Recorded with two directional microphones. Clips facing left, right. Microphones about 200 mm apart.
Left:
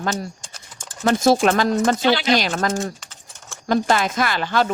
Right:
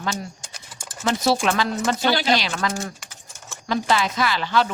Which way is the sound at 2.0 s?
45° right (ahead or behind).